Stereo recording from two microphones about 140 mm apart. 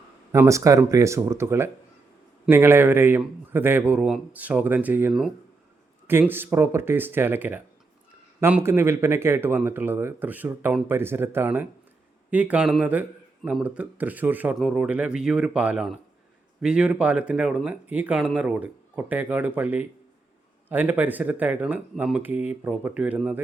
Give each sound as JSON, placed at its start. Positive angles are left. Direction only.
{"t": 0.3, "sound": "speech", "side_deg": -20}